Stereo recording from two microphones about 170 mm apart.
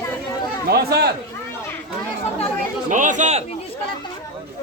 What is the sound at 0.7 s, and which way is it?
Speech, 70° right (ahead or behind).